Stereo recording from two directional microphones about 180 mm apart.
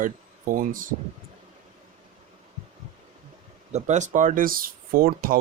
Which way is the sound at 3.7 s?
40° right (ahead or behind).